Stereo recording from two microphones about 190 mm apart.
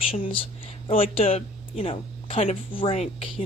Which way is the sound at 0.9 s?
30° left (ahead or behind).